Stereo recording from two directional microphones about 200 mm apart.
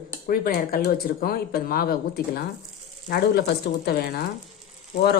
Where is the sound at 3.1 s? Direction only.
50° left (ahead or behind).